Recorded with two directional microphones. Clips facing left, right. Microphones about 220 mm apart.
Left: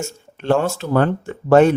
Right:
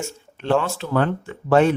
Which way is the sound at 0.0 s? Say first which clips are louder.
Left 3 dB; 45° left (ahead or behind).